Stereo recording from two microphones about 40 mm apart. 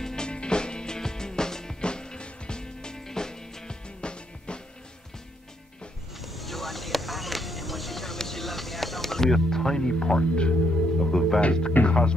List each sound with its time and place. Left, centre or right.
0.0 s music: centre
6.2 s music: centre; by 10.5 s left
11.0 s speech: centre
11.8 s speech: left